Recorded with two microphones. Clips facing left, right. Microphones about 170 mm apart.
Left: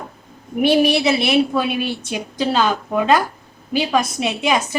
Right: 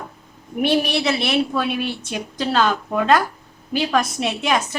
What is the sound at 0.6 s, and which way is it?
A woman's voice, 5° left (ahead or behind).